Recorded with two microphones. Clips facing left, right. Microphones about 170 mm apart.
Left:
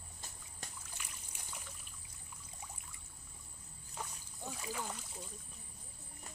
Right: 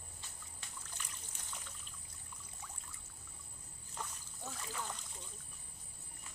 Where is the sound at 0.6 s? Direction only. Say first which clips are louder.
Left 6 dB; 40° left (ahead or behind).